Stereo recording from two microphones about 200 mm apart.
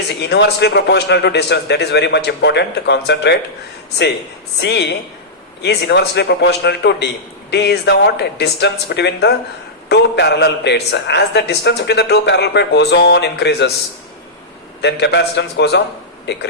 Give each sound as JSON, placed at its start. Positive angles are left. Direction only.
{"t": 0.2, "sound": "speech", "side_deg": 55}
{"t": 4.6, "sound": "speech", "side_deg": 55}
{"t": 14.8, "sound": "speech", "side_deg": 60}